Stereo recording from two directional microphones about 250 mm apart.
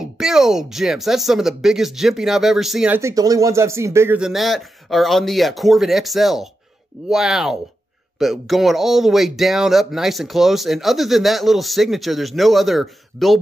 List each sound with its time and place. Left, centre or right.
0.0 s speech: centre